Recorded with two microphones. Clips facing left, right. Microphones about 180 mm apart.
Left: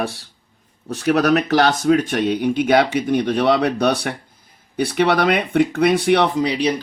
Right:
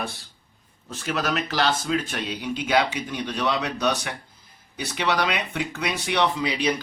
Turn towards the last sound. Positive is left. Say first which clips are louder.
# left 5 dB
turn(degrees=40)  # may be behind; listen again after turning